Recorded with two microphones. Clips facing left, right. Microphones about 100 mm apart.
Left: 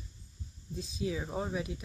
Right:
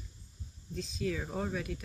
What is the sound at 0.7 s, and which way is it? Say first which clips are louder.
Speech: even; 15° left (ahead or behind).